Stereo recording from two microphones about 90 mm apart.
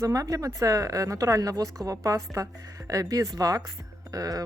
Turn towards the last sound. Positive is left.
turn(degrees=-40)  # may be behind; listen again after turning